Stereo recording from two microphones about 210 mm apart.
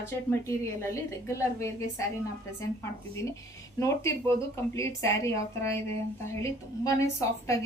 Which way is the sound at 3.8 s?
15° left (ahead or behind).